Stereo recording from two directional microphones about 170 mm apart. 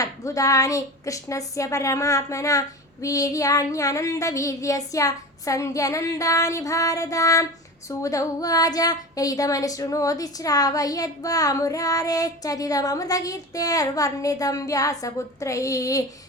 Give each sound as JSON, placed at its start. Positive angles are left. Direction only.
{"t": 0.0, "sound": "a woman's voice", "side_deg": 20}